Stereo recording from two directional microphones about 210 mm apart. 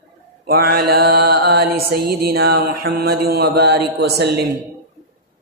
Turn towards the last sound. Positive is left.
turn(degrees=-50)  # may be behind; listen again after turning